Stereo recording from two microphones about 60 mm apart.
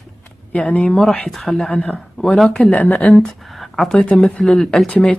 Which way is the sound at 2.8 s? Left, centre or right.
Left.